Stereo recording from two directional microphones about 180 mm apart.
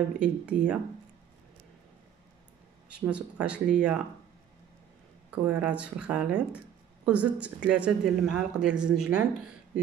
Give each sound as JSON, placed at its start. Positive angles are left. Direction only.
{"t": 0.2, "sound": "speech", "side_deg": -5}
{"t": 2.9, "sound": "speech", "side_deg": -5}
{"t": 5.3, "sound": "speech", "side_deg": -5}